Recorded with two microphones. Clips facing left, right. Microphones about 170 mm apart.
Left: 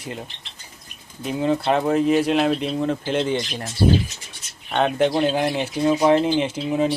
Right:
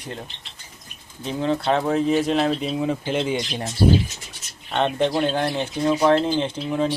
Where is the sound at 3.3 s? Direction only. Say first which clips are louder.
Even; 15° right (ahead or behind).